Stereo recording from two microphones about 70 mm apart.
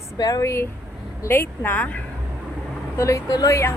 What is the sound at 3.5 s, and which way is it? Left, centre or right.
Speech, left.